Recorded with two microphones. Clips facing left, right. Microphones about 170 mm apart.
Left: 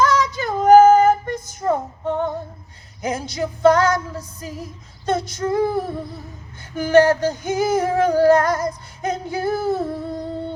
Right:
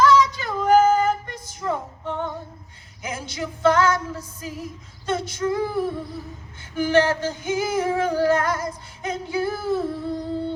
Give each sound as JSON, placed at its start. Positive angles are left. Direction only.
{"t": 0.0, "sound": "female singing", "side_deg": 45}